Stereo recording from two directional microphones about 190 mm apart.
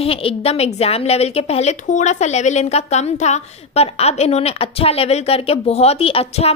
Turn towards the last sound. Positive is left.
turn(degrees=30)  # may be behind; listen again after turning